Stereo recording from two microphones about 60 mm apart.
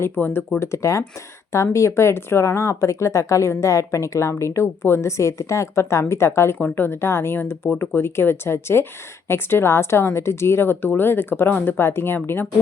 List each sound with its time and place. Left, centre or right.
0.0 s speech: left
0.6 s speech: left
6.6 s speech: left